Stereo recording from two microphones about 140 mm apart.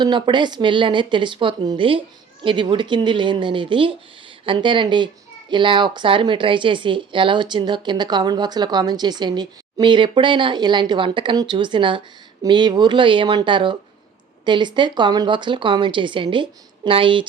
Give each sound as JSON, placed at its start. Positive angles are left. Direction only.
{"t": 0.0, "sound": "speech", "side_deg": -35}